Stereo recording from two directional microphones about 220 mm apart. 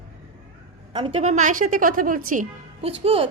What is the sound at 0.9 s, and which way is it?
A woman's voice, 30° right (ahead or behind).